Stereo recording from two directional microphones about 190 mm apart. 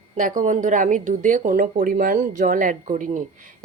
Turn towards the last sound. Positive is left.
turn(degrees=-40)  # may be behind; listen again after turning